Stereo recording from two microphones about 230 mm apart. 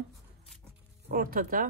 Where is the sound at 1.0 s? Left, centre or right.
Right.